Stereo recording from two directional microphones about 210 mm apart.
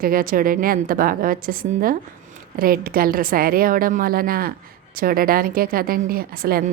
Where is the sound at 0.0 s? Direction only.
40° right (ahead or behind).